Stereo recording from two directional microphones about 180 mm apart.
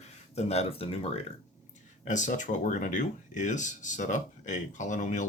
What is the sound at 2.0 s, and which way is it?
Speech, 45° left (ahead or behind).